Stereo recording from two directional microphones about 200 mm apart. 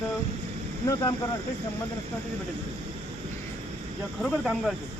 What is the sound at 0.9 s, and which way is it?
Speech, 15° left (ahead or behind).